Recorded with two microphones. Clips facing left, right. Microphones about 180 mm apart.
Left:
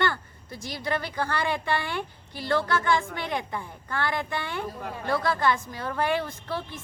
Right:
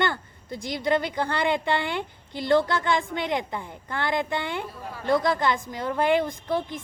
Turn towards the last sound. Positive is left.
turn(degrees=-15)  # may be behind; listen again after turning